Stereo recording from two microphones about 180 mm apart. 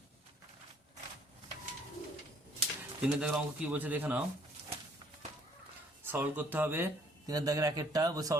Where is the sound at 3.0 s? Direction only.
5° right (ahead or behind).